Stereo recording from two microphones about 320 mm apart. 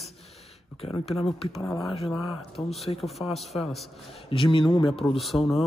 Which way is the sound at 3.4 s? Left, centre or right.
Centre.